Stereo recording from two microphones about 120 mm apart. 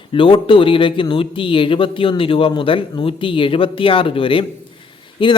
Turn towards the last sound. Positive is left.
turn(degrees=40)  # may be behind; listen again after turning